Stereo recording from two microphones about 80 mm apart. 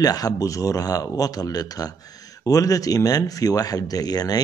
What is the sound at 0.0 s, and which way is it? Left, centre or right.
Speech, left.